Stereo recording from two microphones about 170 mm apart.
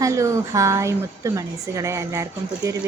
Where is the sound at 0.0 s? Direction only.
15° right (ahead or behind).